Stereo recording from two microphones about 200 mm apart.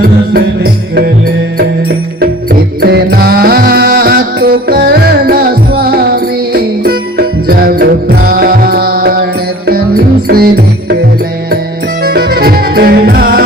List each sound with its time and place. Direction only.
0.0 s music: 50° right (ahead or behind)
2.5 s music: 50° right (ahead or behind)
10.2 s music: 50° right (ahead or behind)
12.0 s music: 50° right (ahead or behind)